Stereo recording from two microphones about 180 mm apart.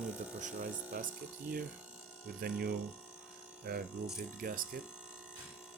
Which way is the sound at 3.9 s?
5° right (ahead or behind).